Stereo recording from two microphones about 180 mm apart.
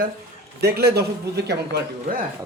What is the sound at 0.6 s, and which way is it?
Speech, 60° right (ahead or behind).